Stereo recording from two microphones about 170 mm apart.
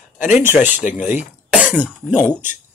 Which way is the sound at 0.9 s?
10° right (ahead or behind).